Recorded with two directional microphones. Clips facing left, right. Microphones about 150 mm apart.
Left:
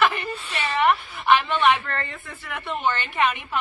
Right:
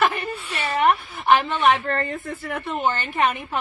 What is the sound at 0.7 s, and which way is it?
A woman's voice, 40° right (ahead or behind).